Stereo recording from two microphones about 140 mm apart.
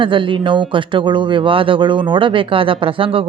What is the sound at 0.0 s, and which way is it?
Speech, 35° right (ahead or behind).